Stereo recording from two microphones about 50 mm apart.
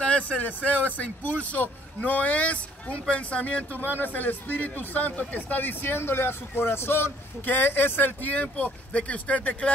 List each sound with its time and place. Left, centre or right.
0.0 s a sound: left
0.7 s speech: left
7.4 s speech: left